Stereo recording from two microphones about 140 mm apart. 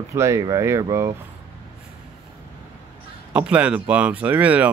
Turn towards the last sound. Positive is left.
turn(degrees=-10)  # may be behind; listen again after turning